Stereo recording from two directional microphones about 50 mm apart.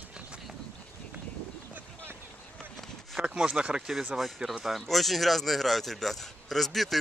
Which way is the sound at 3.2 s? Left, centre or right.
Centre.